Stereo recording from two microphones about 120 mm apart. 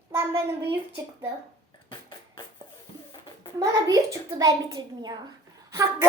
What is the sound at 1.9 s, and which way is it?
Beatboxing, 45° left (ahead or behind).